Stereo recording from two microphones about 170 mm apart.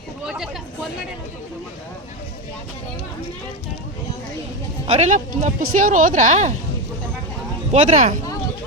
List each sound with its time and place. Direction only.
0.3 s speech: centre (ahead or behind)
4.9 s speech: 45° right (ahead or behind)
7.7 s speech: 50° right (ahead or behind)